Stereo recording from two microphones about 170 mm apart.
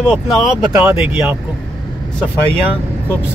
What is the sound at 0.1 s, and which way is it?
Speech, centre (ahead or behind).